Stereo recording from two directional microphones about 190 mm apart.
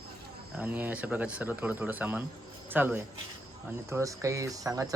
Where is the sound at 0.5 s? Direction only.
10° right (ahead or behind).